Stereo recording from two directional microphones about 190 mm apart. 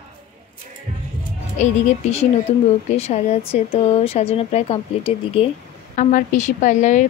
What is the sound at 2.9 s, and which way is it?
Speech, 35° left (ahead or behind).